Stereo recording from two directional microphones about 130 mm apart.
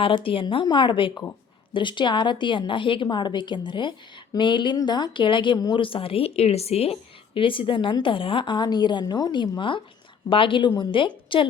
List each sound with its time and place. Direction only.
0.0 s speech: 40° left (ahead or behind)